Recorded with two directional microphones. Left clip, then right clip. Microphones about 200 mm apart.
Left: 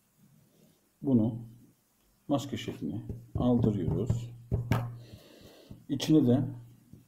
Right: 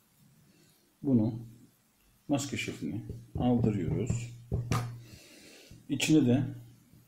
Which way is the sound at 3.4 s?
15° left (ahead or behind).